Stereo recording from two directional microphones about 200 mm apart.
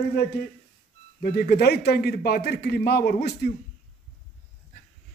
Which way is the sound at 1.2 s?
50° left (ahead or behind).